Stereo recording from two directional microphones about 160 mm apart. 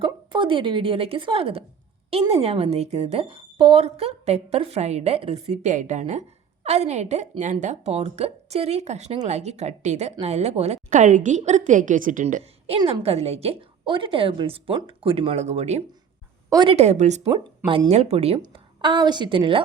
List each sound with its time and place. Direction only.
0.0 s a woman's voice: 30° right (ahead or behind); by 12.4 s 55° right (ahead or behind)
12.4 s a woman's voice: 40° right (ahead or behind)
16.5 s a woman's voice: 25° right (ahead or behind)
16.7 s a woman's voice: 45° right (ahead or behind)
18.3 s a woman's voice: 30° right (ahead or behind)